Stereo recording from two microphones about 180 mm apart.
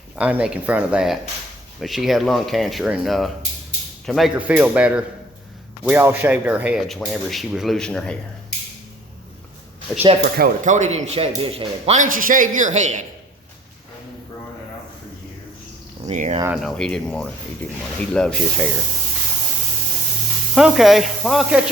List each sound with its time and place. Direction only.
0.2 s speech: 5° right (ahead or behind)
9.9 s speech: 5° left (ahead or behind)
10.3 s speech: 50° right (ahead or behind)
16.0 s speech: 40° right (ahead or behind)
16.6 s speech: centre (ahead or behind)
20.6 s speech: centre (ahead or behind)